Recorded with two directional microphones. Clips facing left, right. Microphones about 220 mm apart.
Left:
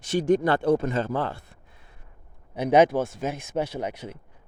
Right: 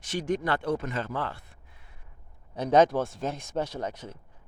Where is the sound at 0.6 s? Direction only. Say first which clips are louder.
Left 7 dB; 30° left (ahead or behind).